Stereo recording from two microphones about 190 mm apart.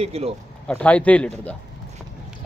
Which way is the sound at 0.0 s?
30° right (ahead or behind).